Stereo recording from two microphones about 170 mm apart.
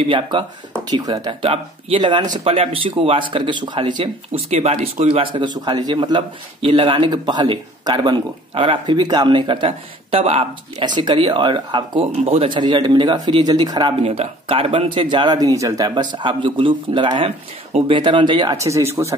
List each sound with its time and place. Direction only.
0.1 s speech: 30° right (ahead or behind)